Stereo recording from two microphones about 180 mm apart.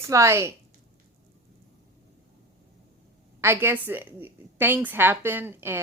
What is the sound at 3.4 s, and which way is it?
Speech, 15° right (ahead or behind).